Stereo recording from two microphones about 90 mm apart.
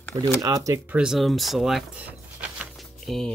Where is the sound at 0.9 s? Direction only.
5° right (ahead or behind).